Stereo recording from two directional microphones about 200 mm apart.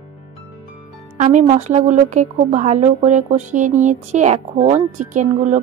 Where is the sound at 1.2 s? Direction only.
35° right (ahead or behind).